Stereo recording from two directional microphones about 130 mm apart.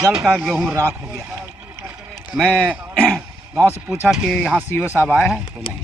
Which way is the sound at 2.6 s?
10° right (ahead or behind).